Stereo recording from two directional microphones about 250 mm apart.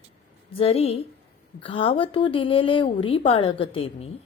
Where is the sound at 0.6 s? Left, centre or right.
Left.